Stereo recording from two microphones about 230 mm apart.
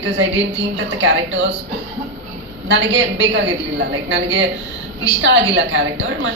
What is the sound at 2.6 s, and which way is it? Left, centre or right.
A man's voice, right.